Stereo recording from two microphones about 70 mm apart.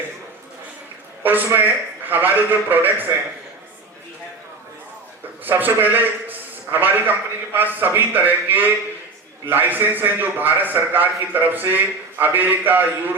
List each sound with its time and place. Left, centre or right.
1.2 s a man's voice: right
5.5 s a man's voice: right